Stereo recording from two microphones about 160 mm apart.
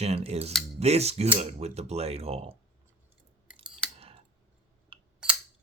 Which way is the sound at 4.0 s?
35° right (ahead or behind).